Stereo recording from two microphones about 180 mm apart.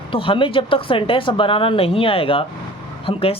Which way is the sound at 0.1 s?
30° left (ahead or behind).